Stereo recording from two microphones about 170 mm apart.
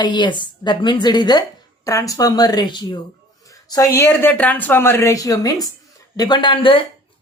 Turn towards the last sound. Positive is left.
turn(degrees=30)  # may be behind; listen again after turning